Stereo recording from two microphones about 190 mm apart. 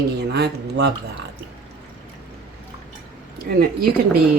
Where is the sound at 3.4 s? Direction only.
55° right (ahead or behind).